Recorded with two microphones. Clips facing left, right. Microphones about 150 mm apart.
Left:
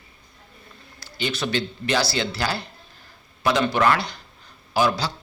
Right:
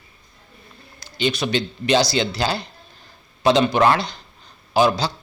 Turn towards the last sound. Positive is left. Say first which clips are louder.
# right 4 dB
turn(degrees=-20)  # may be behind; listen again after turning